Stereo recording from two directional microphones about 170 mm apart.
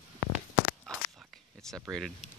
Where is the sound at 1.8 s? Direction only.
Centre (ahead or behind).